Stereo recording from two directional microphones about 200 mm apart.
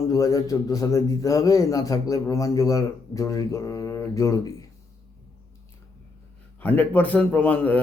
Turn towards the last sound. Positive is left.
turn(degrees=5)  # may be behind; listen again after turning